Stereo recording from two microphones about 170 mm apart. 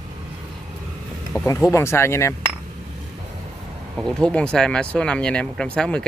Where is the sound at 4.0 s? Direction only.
5° left (ahead or behind).